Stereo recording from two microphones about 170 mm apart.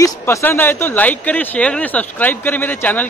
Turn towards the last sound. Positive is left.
turn(degrees=10)  # may be behind; listen again after turning